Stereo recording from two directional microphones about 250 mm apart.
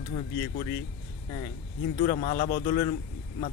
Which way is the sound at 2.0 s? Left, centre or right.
Left.